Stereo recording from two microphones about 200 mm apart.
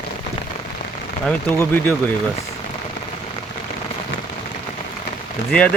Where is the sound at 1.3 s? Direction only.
10° left (ahead or behind).